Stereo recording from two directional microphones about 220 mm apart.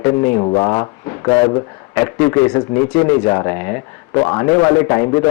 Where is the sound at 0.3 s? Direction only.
25° left (ahead or behind).